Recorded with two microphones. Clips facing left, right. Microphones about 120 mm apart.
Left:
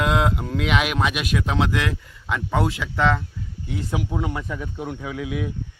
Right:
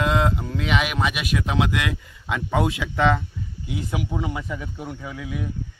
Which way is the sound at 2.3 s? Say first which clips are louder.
Even; 20° right (ahead or behind).